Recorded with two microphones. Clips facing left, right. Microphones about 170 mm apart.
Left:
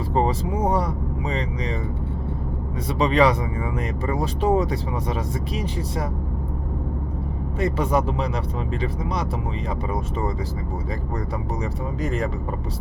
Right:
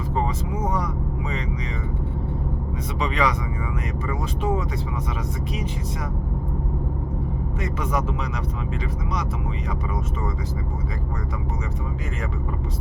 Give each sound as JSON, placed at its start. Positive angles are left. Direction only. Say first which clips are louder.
{"t": 0.1, "sound": "speech", "louder": "left 5 dB", "side_deg": 35}
{"t": 3.0, "sound": "speech", "louder": "left 6 dB", "side_deg": 35}
{"t": 7.6, "sound": "speech", "louder": "left 6 dB", "side_deg": 30}